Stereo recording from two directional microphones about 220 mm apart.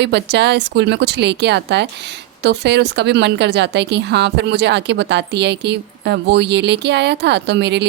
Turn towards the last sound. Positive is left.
turn(degrees=-50)  # may be behind; listen again after turning